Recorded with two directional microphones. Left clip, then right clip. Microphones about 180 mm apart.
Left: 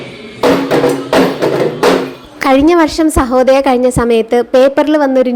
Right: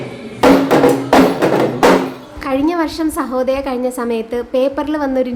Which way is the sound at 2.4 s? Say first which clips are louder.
Left 8 dB; 40° left (ahead or behind).